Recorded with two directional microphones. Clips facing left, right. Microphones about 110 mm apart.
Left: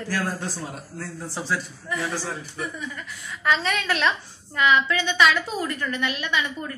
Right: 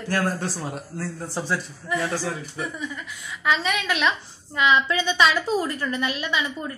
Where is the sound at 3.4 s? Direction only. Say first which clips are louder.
Even; 5° right (ahead or behind); by 6.5 s 20° right (ahead or behind).